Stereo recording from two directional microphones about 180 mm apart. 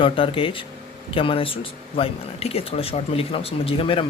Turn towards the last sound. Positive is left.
turn(degrees=30)  # may be behind; listen again after turning